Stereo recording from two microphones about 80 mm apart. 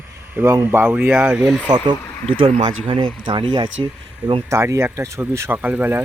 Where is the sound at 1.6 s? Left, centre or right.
Right.